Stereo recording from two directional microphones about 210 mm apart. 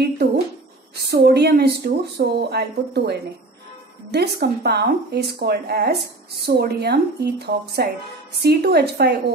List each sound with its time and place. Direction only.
1.0 s speech: 50° right (ahead or behind)